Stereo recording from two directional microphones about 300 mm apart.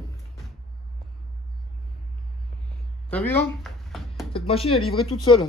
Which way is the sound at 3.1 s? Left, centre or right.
Centre.